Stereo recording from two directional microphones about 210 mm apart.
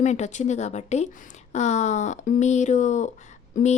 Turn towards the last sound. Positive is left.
turn(degrees=35)  # may be behind; listen again after turning